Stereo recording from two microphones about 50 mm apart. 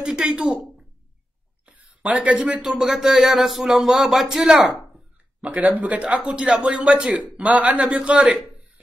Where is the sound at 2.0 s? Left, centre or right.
Right.